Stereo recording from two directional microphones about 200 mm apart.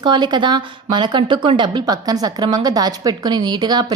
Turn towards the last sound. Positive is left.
turn(degrees=-20)  # may be behind; listen again after turning